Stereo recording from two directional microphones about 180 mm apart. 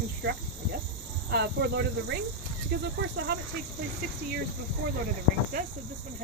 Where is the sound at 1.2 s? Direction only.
65° right (ahead or behind).